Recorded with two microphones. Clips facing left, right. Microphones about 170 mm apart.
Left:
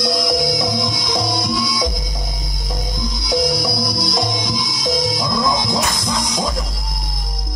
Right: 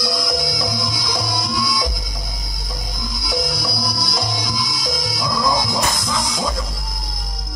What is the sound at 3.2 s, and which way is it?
Music, 20° left (ahead or behind).